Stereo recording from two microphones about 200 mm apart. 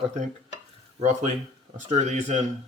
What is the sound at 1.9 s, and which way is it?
Speech, 35° right (ahead or behind).